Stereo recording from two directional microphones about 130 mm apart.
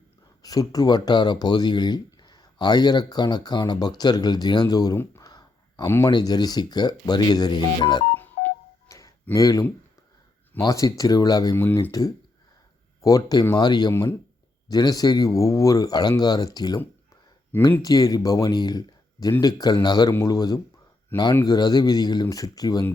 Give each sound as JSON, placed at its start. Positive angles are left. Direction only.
{"t": 0.4, "sound": "speech", "side_deg": 30}
{"t": 4.9, "sound": "a sound", "side_deg": 25}
{"t": 6.1, "sound": "speech", "side_deg": 35}
{"t": 8.1, "sound": "telephone dialing", "side_deg": 15}
{"t": 9.3, "sound": "speech", "side_deg": 25}
{"t": 11.5, "sound": "speech", "side_deg": 15}
{"t": 11.9, "sound": "speech", "side_deg": 30}
{"t": 13.9, "sound": "speech", "side_deg": 15}
{"t": 14.7, "sound": "speech", "side_deg": 30}
{"t": 17.5, "sound": "speech", "side_deg": 15}
{"t": 17.8, "sound": "speech", "side_deg": 30}
{"t": 21.1, "sound": "speech", "side_deg": 15}
{"t": 21.4, "sound": "speech", "side_deg": 30}